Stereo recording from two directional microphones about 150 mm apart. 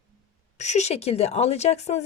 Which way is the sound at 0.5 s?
50° left (ahead or behind).